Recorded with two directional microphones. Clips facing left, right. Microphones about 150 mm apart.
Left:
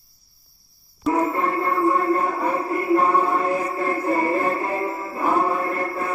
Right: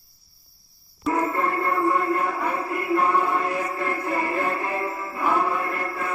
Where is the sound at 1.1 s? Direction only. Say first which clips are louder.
Left 2 dB; 20° left (ahead or behind).